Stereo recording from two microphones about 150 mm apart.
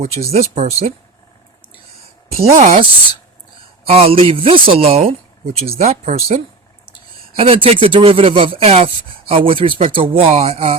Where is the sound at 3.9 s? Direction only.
40° right (ahead or behind).